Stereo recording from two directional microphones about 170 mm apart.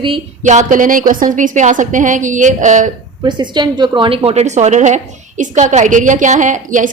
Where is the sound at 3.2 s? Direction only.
25° right (ahead or behind); by 6.9 s 50° right (ahead or behind).